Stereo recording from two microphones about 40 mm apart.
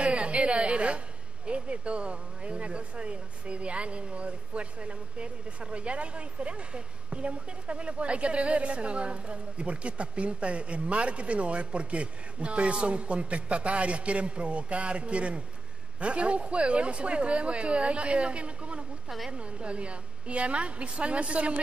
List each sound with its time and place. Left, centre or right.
0.0 s a woman's voice: right
19.0 s a woman's voice: centre
19.3 s speech: right